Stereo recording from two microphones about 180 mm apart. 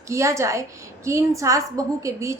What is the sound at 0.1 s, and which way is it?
A woman's voice, 15° right (ahead or behind).